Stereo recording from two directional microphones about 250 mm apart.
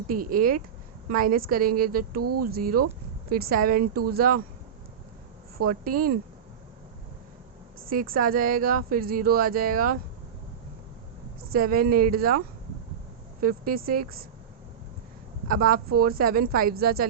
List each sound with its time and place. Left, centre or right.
0.1 s speech: right
2.2 s speech: right
2.5 s speech: right
5.5 s speech: right
7.9 s speech: right
11.5 s speech: right
13.4 s speech: right
15.4 s speech: right